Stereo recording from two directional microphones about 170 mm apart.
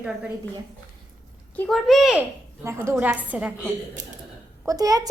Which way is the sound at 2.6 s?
15° right (ahead or behind).